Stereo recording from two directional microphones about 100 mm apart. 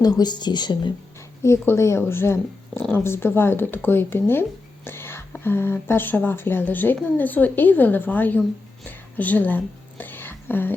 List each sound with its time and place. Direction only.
0.0 s a woman's voice: 40° left (ahead or behind)
1.4 s speech: 25° left (ahead or behind)
9.1 s a sound: 15° left (ahead or behind)